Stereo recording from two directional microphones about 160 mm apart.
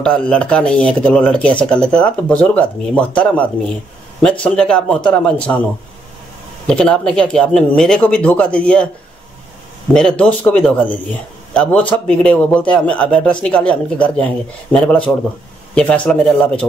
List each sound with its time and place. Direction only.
0.0 s a man's voice: 5° left (ahead or behind)
4.2 s a man's voice: 5° left (ahead or behind)
6.7 s speech: 5° left (ahead or behind)
9.9 s a man's voice: 5° left (ahead or behind)